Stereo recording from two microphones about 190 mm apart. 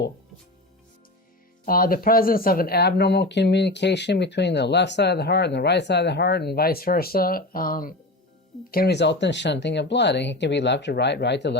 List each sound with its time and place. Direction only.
1.6 s speech: 50° left (ahead or behind)